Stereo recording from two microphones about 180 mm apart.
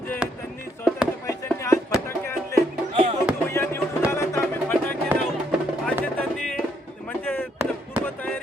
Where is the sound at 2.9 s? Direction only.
30° right (ahead or behind).